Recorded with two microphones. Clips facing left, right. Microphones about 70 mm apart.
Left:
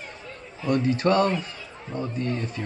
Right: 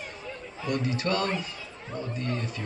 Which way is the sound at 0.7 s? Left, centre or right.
Left.